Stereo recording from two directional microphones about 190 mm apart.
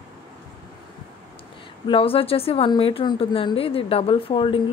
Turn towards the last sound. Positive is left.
turn(degrees=30)  # may be behind; listen again after turning